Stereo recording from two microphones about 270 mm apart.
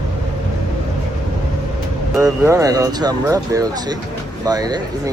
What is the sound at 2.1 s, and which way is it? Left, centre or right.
Speech, centre.